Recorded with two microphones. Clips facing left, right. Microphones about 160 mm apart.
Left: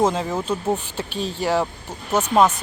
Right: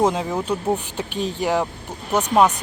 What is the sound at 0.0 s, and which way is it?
Speech, 15° right (ahead or behind).